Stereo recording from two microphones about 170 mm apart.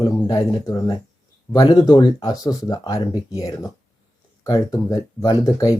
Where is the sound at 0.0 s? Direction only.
20° left (ahead or behind).